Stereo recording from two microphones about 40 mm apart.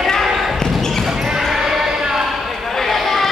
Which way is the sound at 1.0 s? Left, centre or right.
Centre.